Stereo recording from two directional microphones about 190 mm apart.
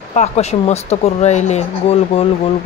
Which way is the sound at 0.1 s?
35° left (ahead or behind).